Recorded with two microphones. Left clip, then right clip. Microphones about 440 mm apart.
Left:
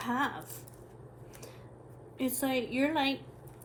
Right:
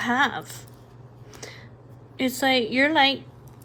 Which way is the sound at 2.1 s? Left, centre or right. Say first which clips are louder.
Right 10 dB; centre.